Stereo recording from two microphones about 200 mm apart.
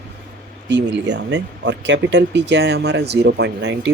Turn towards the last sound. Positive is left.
turn(degrees=-60)  # may be behind; listen again after turning